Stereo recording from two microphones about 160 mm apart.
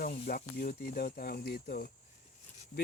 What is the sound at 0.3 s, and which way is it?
Speech, 65° left (ahead or behind).